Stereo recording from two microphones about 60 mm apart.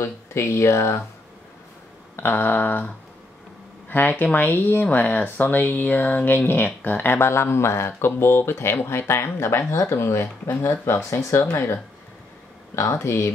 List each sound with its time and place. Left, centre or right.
0.0 s speech: left
2.1 s speech: left
3.9 s speech: left